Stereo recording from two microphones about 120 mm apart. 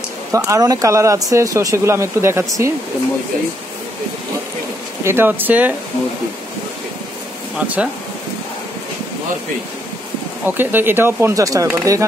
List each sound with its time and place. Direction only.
0.3 s speech: 30° right (ahead or behind)
5.0 s speech: 20° right (ahead or behind)
7.5 s speech: 10° right (ahead or behind)
10.4 s speech: 15° right (ahead or behind)